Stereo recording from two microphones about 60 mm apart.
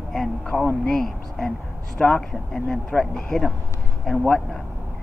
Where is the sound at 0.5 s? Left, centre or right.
Left.